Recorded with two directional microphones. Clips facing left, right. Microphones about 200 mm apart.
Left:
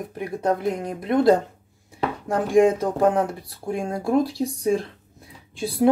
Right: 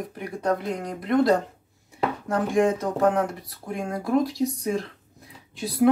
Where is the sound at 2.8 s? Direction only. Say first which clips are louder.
Left 2 dB; 30° left (ahead or behind).